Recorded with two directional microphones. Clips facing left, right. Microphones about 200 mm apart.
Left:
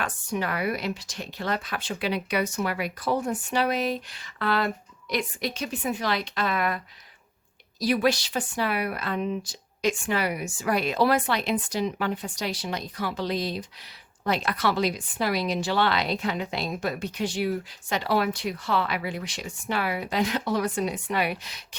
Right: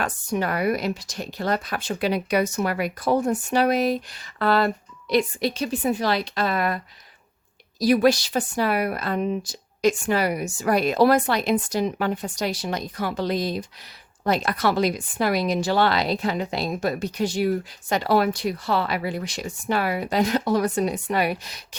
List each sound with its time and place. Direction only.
0.0 s speech: 45° right (ahead or behind)